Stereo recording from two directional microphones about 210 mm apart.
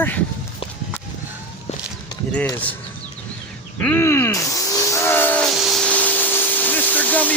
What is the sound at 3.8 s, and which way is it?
Speech, 10° left (ahead or behind).